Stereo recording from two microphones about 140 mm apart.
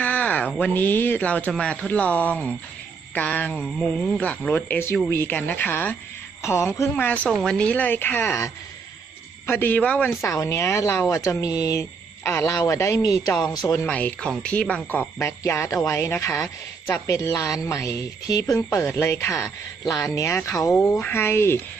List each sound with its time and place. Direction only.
0.0 s speech: 10° left (ahead or behind)
9.5 s speech: 15° left (ahead or behind)
13.8 s speech: 10° left (ahead or behind)